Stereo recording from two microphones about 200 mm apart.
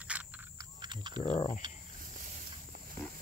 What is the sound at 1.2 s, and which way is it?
Speech, 30° left (ahead or behind).